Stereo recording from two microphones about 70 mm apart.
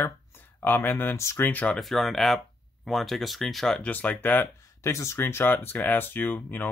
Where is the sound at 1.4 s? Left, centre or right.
Left.